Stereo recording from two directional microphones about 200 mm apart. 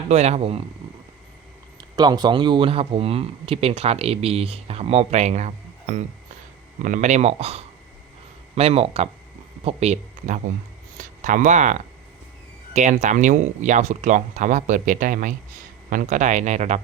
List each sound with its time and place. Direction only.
0.1 s speech: 35° right (ahead or behind)
1.8 s speech: 20° right (ahead or behind)